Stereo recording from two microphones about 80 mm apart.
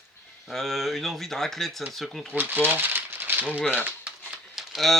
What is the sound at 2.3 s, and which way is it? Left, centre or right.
Speech, right.